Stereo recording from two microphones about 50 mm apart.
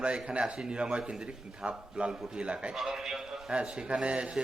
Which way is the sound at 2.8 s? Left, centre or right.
Centre.